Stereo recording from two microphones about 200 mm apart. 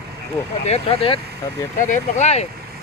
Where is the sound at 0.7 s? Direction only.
25° left (ahead or behind).